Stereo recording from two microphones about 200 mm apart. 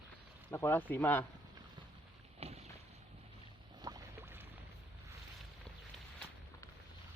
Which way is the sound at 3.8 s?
20° right (ahead or behind).